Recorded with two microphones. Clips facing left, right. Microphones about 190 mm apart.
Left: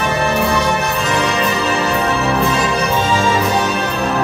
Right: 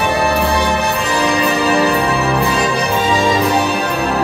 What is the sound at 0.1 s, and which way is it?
Music, 35° right (ahead or behind).